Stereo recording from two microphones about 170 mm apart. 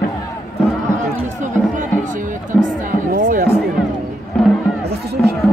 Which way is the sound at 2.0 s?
50° right (ahead or behind).